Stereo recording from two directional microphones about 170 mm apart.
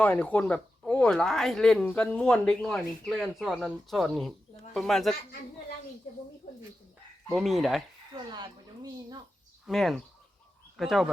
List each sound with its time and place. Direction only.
0.0 s speech: 10° left (ahead or behind)
6.4 s dog: 50° left (ahead or behind)
7.3 s speech: centre (ahead or behind)
8.3 s speech: 25° right (ahead or behind)
9.6 s speech: centre (ahead or behind)